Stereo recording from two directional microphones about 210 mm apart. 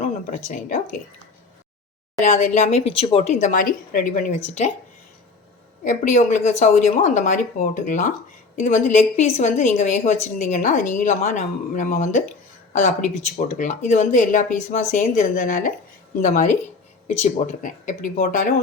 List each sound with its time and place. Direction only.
0.0 s speech: 40° left (ahead or behind)
2.2 s a woman's voice: 35° left (ahead or behind)
5.8 s a woman's voice: 35° left (ahead or behind)